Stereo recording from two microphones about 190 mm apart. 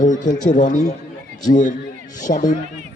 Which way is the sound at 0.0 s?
40° left (ahead or behind).